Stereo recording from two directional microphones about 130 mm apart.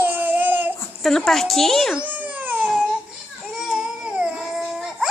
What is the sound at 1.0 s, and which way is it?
A child's voice, 5° left (ahead or behind).